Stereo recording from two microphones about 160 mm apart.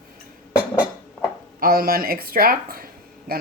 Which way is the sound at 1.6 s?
65° right (ahead or behind).